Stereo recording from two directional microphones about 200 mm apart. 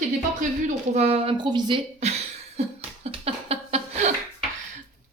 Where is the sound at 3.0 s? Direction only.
30° right (ahead or behind).